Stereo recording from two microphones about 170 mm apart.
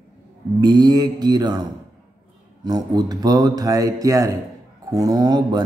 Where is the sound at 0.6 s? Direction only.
25° right (ahead or behind).